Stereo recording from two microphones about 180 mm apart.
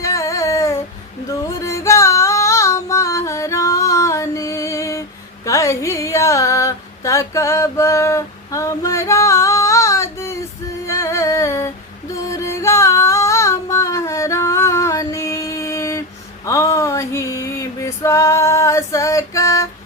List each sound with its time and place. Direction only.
0.0 s a sound: 15° left (ahead or behind)
1.3 s music: 15° left (ahead or behind)
5.5 s a sound: 15° left (ahead or behind)
10.8 s music: 15° left (ahead or behind)
12.1 s singing: 15° left (ahead or behind)
16.5 s female singing: 20° left (ahead or behind)